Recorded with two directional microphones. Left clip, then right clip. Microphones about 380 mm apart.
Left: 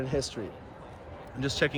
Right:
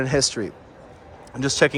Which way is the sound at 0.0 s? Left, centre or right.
Centre.